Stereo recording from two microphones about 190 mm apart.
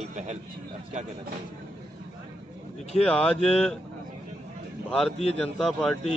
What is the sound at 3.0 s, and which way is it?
Speech, 5° left (ahead or behind).